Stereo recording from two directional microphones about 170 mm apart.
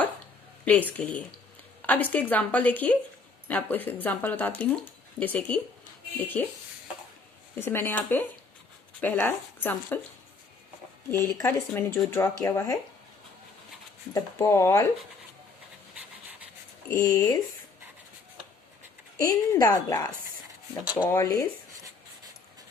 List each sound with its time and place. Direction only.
0.6 s speech: 10° left (ahead or behind)
7.6 s speech: 15° left (ahead or behind)
11.3 s speech: 15° left (ahead or behind)
14.1 s speech: 20° left (ahead or behind)
16.9 s a woman's voice: 20° left (ahead or behind)
19.2 s a woman's voice: 20° left (ahead or behind)
20.8 s speech: 10° right (ahead or behind)
21.1 s speech: 15° left (ahead or behind)